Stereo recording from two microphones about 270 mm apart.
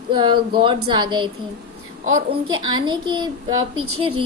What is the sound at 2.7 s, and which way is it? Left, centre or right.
Speech, centre.